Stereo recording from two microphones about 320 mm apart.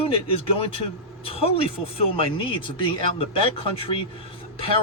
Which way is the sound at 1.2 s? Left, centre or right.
Centre.